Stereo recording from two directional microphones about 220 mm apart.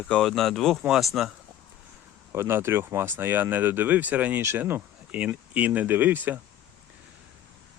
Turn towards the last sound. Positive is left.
turn(degrees=-10)  # may be behind; listen again after turning